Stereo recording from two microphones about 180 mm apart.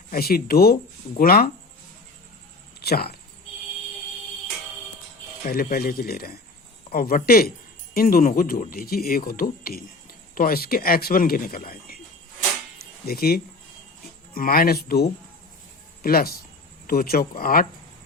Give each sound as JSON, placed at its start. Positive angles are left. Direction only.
{"t": 0.1, "sound": "speech", "side_deg": 55}
{"t": 2.8, "sound": "speech", "side_deg": 60}
{"t": 5.5, "sound": "speech", "side_deg": 55}
{"t": 13.1, "sound": "speech", "side_deg": 55}